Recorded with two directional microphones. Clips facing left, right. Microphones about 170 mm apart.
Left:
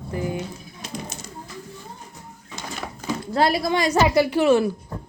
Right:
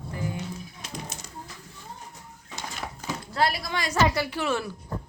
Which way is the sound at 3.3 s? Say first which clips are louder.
Left 7 dB; 20° left (ahead or behind).